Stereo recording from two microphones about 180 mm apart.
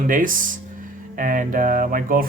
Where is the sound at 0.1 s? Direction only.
50° right (ahead or behind).